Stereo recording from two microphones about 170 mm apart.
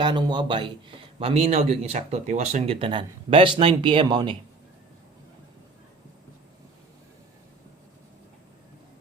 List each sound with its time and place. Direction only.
0.0 s a man's voice: 25° right (ahead or behind)